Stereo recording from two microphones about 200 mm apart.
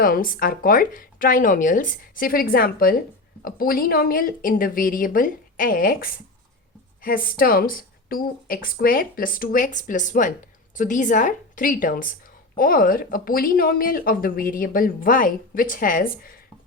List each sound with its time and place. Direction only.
0.0 s a woman's voice: 45° left (ahead or behind)